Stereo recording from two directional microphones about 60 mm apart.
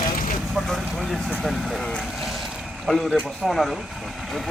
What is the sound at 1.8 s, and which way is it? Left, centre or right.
A man's voice, centre.